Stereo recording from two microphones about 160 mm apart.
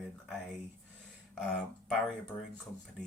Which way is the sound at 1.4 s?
5° left (ahead or behind).